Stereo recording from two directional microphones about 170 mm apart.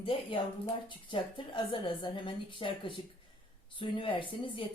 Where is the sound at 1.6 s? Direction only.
30° left (ahead or behind).